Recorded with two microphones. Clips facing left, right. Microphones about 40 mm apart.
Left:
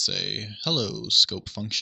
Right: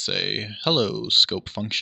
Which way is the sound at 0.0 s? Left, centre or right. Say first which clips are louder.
Right 4 dB; right.